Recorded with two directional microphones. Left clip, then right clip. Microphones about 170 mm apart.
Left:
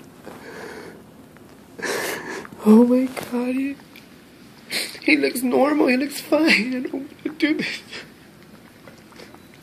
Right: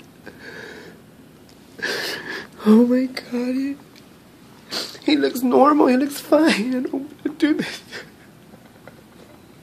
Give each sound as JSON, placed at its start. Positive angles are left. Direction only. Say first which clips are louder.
{"t": 0.4, "sound": "sniff", "louder": "even", "side_deg": -25}
{"t": 1.8, "sound": "a sound", "louder": "even", "side_deg": -20}
{"t": 4.6, "sound": "speech", "louder": "left 2 dB", "side_deg": -20}